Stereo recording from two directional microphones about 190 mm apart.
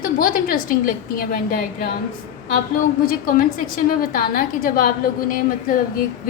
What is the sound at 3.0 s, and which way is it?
A woman's voice, 50° left (ahead or behind).